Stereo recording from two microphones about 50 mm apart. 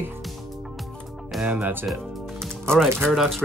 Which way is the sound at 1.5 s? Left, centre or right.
Right.